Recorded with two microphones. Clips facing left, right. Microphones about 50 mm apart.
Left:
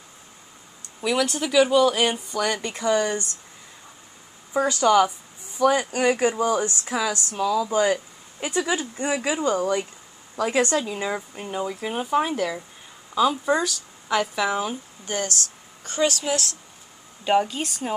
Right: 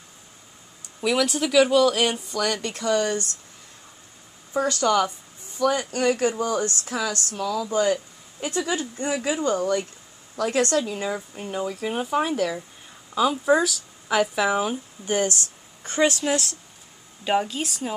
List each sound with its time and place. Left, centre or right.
1.0 s a woman's voice: centre
4.6 s a woman's voice: centre
15.0 s speech: centre
17.3 s speech: centre